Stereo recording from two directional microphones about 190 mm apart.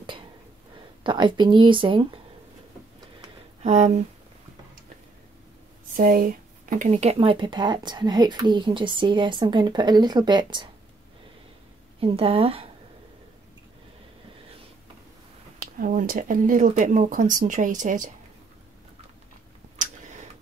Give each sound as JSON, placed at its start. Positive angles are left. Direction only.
{"t": 1.0, "sound": "speech", "side_deg": -25}
{"t": 3.6, "sound": "speech", "side_deg": -35}
{"t": 5.9, "sound": "speech", "side_deg": -50}
{"t": 12.0, "sound": "speech", "side_deg": -30}
{"t": 15.8, "sound": "speech", "side_deg": -45}
{"t": 19.8, "sound": "tick-tock", "side_deg": -40}